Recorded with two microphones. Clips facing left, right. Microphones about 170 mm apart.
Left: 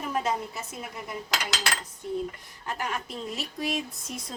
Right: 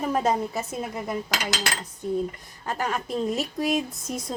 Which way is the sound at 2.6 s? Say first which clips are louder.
Right 5 dB; 40° right (ahead or behind).